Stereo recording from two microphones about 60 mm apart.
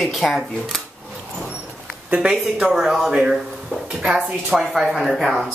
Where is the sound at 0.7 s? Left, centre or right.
Centre.